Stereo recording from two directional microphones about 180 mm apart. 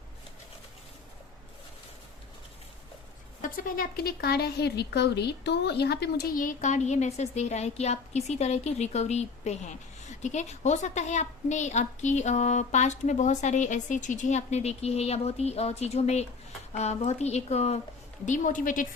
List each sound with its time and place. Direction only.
3.4 s a woman's voice: 50° left (ahead or behind)